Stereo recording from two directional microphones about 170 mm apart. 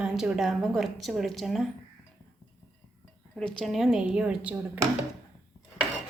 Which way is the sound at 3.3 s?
5° left (ahead or behind).